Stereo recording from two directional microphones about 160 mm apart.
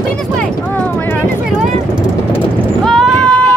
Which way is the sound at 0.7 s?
10° left (ahead or behind).